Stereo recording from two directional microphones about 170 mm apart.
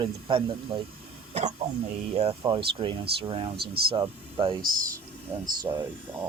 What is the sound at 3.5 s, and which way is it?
Speech, 70° right (ahead or behind).